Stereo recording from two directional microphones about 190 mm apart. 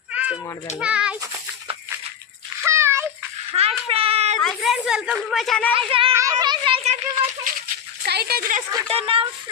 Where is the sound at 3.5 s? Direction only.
30° right (ahead or behind).